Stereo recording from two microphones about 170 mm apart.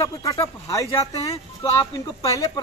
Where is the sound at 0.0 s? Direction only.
20° left (ahead or behind).